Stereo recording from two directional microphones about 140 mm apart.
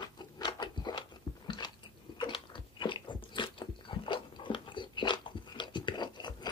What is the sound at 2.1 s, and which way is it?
Biting, 35° left (ahead or behind).